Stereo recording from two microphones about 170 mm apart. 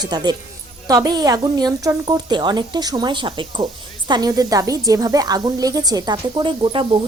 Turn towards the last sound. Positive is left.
turn(degrees=-30)  # may be behind; listen again after turning